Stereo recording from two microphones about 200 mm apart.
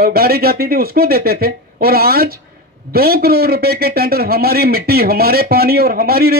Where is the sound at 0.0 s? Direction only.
50° right (ahead or behind).